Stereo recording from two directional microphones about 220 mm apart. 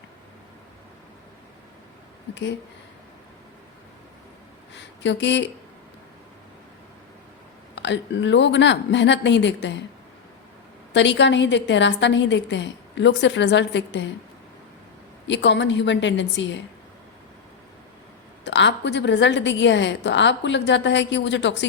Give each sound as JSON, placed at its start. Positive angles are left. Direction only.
{"t": 2.3, "sound": "a woman's voice", "side_deg": 55}
{"t": 4.7, "sound": "a sound", "side_deg": 55}
{"t": 7.8, "sound": "a woman's voice", "side_deg": 55}
{"t": 10.9, "sound": "a woman's voice", "side_deg": 55}
{"t": 15.3, "sound": "a woman's voice", "side_deg": 55}
{"t": 18.4, "sound": "a woman's voice", "side_deg": 55}